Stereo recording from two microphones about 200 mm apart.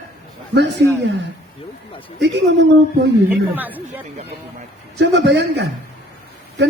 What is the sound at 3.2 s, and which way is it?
Speech, 10° right (ahead or behind).